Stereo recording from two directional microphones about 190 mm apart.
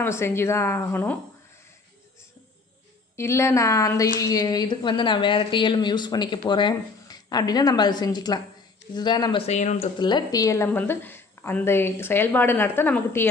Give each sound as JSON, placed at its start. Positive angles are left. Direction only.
{"t": 0.0, "sound": "a woman's voice", "side_deg": 15}
{"t": 3.2, "sound": "a woman's voice", "side_deg": 15}
{"t": 9.5, "sound": "speech", "side_deg": 35}
{"t": 9.9, "sound": "a woman's voice", "side_deg": 25}